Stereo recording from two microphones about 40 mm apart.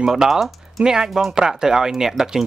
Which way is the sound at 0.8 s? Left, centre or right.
Centre.